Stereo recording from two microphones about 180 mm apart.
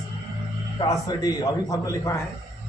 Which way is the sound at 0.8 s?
20° left (ahead or behind).